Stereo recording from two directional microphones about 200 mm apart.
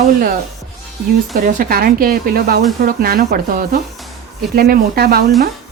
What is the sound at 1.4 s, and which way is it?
Speech, 45° right (ahead or behind).